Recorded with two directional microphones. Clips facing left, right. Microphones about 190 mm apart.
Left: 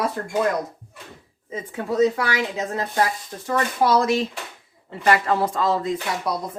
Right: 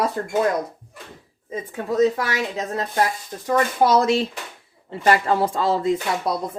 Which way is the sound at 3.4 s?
20° right (ahead or behind).